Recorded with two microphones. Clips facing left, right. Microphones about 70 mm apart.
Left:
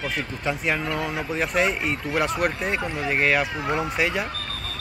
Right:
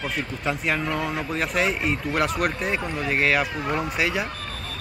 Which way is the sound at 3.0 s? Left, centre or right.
Centre.